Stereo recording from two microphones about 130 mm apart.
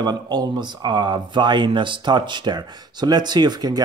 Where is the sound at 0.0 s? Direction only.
30° right (ahead or behind).